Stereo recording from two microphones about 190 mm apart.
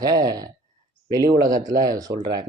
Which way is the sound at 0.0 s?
20° right (ahead or behind).